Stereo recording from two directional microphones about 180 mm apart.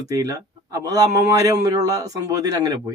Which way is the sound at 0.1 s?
20° right (ahead or behind).